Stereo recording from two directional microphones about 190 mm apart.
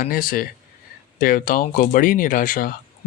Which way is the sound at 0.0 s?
45° left (ahead or behind).